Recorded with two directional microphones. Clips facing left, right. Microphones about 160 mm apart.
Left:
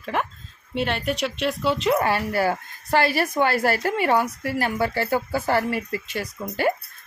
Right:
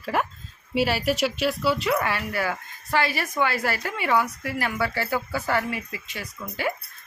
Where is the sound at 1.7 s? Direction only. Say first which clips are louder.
Left 4 dB; 25° left (ahead or behind); by 6.7 s 40° left (ahead or behind).